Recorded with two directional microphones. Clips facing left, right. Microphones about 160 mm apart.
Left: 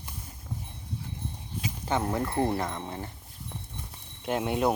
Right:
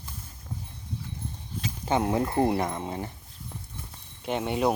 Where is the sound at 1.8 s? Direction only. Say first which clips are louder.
Right 4 dB; 15° right (ahead or behind).